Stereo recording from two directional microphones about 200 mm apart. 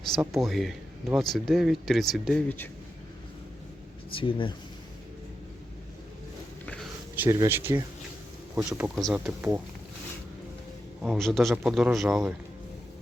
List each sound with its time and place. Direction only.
0.3 s speech: centre (ahead or behind)
4.1 s speech: 25° left (ahead or behind)
7.2 s speech: 15° right (ahead or behind)
11.0 s speech: centre (ahead or behind)